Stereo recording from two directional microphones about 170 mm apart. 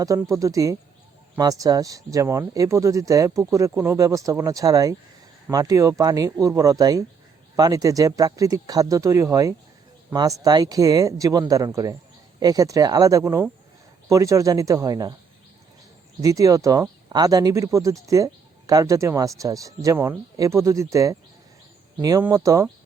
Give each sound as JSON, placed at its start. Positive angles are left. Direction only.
{"t": 0.0, "sound": "speech", "side_deg": -20}
{"t": 16.2, "sound": "speech", "side_deg": -20}
{"t": 22.2, "sound": "speech", "side_deg": -20}